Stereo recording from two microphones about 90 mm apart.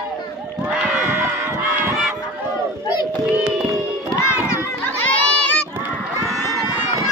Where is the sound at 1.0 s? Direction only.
25° right (ahead or behind).